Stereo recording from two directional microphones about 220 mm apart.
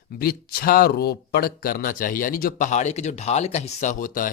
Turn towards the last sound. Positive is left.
turn(degrees=40)  # may be behind; listen again after turning